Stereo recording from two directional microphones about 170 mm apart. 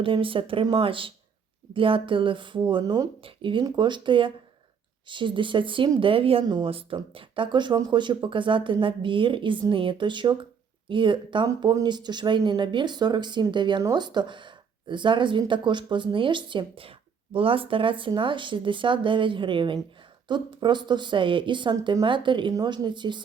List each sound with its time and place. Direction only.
0.0 s speech: 30° right (ahead or behind)